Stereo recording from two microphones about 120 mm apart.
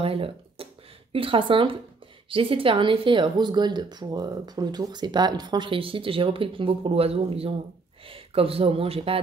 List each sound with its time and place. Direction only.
0.0 s speech: 50° right (ahead or behind)